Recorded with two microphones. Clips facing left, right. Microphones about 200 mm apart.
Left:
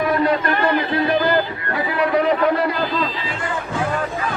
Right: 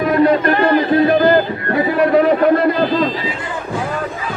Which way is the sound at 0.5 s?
45° right (ahead or behind).